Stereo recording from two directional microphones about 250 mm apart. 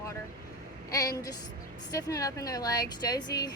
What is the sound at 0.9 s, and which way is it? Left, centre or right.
Speech, centre.